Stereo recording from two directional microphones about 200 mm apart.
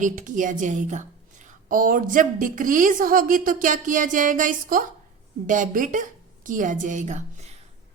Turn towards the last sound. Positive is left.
turn(degrees=-35)  # may be behind; listen again after turning